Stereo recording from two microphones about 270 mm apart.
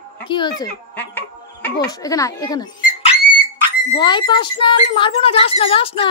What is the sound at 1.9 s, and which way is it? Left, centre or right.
Speech, centre.